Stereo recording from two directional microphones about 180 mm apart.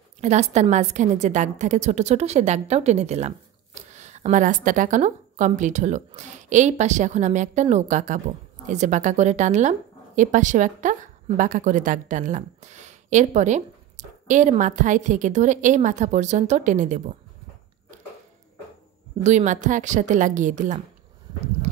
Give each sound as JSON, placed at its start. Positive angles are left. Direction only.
{"t": 0.2, "sound": "a woman's voice", "side_deg": -40}
{"t": 3.9, "sound": "a sound", "side_deg": -40}
{"t": 4.6, "sound": "a woman's voice", "side_deg": -45}
{"t": 19.2, "sound": "a woman's voice", "side_deg": -40}